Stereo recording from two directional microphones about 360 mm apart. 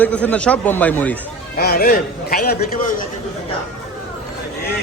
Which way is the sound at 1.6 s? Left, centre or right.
Left.